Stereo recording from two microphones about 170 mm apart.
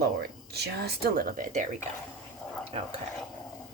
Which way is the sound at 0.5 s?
70° right (ahead or behind).